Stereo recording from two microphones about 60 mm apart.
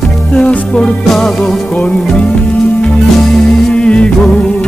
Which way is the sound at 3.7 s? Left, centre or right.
Centre.